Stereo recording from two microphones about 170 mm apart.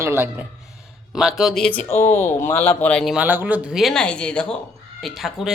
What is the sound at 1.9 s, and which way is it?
Speech, 45° left (ahead or behind).